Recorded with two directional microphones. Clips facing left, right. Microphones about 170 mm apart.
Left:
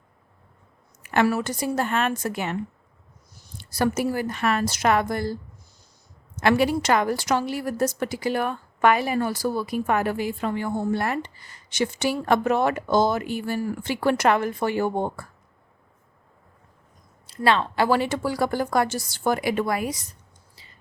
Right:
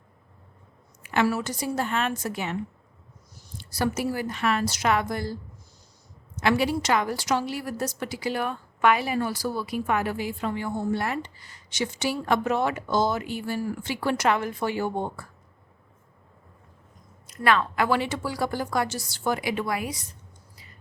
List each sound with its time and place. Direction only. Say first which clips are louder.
1.0 s a woman's voice: left 3 dB; 50° left (ahead or behind)
3.7 s a woman's voice: left 3 dB; 50° left (ahead or behind)
6.3 s a woman's voice: left 3 dB; 50° left (ahead or behind)
17.2 s a woman's voice: left 2 dB; 30° left (ahead or behind)